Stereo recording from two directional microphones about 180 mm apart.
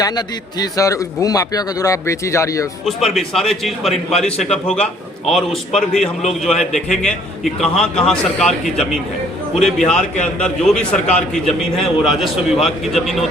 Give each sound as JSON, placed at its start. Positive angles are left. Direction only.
{"t": 0.0, "sound": "a man's voice", "side_deg": 20}
{"t": 2.8, "sound": "a man's voice", "side_deg": 0}
{"t": 6.5, "sound": "a man's voice", "side_deg": 40}
{"t": 6.7, "sound": "a man's voice", "side_deg": 0}